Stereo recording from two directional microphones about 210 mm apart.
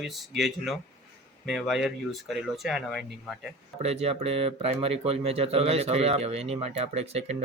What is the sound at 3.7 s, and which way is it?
Speech, 30° right (ahead or behind).